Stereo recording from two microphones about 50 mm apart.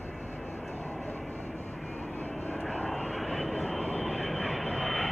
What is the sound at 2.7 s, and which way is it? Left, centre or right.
Vehicle, centre.